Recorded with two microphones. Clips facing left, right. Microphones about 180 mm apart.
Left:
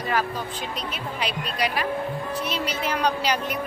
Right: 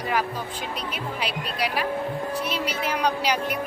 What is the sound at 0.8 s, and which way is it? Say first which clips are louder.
Speech: even; 10° right (ahead or behind).